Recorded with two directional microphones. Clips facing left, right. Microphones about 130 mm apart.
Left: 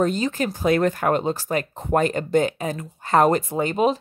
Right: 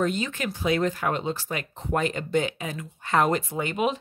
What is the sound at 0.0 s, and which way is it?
Speech, 40° left (ahead or behind).